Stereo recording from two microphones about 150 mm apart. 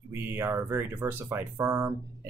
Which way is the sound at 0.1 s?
15° right (ahead or behind).